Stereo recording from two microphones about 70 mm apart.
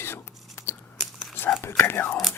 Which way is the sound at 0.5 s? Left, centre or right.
Left.